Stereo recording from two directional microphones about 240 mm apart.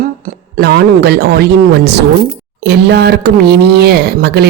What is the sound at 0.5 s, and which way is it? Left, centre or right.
A woman's voice, right.